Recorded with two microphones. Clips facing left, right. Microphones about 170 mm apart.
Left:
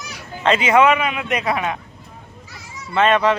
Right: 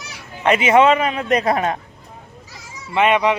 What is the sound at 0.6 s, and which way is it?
A man's voice, 25° right (ahead or behind).